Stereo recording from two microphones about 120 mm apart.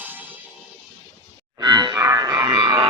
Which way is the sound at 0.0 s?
15° right (ahead or behind).